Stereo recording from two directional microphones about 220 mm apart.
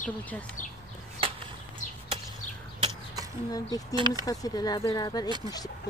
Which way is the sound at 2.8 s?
15° right (ahead or behind).